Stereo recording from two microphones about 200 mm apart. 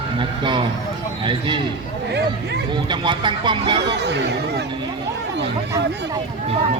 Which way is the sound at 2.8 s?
25° right (ahead or behind).